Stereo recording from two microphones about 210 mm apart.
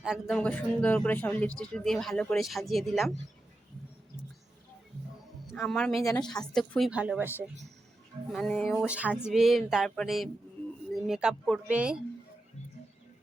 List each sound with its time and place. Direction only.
0.0 s speech: centre (ahead or behind)
5.5 s a man's voice: centre (ahead or behind)